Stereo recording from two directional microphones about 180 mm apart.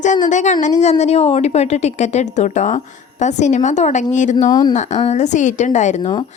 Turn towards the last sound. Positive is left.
turn(degrees=40)  # may be behind; listen again after turning